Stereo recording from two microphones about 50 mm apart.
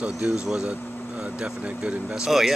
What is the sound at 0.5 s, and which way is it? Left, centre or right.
Speech, centre.